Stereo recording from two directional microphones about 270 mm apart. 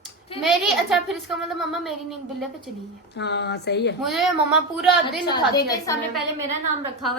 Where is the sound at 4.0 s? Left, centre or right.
Centre.